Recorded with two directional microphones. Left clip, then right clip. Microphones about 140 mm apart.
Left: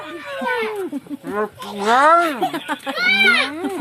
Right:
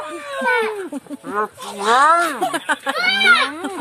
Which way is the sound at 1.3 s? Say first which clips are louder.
Right 1 dB; 10° right (ahead or behind).